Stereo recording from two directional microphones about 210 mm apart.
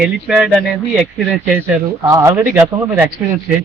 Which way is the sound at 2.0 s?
15° right (ahead or behind).